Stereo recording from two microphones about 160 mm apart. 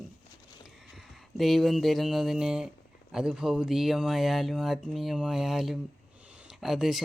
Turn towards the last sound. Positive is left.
turn(degrees=0)  # may be behind; listen again after turning